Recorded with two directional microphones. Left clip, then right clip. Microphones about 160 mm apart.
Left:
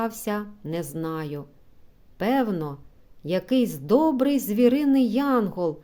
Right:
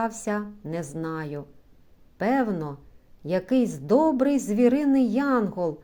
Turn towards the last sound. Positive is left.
turn(degrees=20)  # may be behind; listen again after turning